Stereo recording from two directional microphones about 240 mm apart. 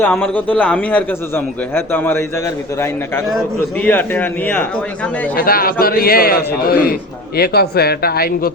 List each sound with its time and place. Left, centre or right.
0.0 s a man's voice: centre
3.3 s a man's voice: centre
5.4 s speech: left